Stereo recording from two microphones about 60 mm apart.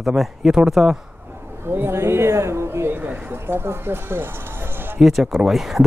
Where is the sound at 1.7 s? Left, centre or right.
Right.